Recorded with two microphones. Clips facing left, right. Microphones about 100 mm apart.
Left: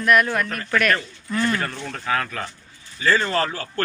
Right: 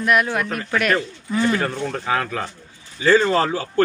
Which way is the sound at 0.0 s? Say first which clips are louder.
Even; 15° right (ahead or behind).